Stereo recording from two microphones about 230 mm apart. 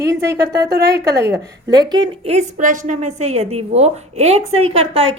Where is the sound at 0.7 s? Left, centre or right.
Right.